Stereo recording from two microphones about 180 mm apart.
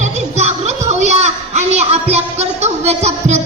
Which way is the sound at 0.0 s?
40° right (ahead or behind).